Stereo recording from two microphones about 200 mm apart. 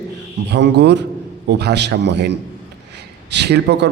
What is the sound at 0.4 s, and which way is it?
A man's voice, 60° right (ahead or behind).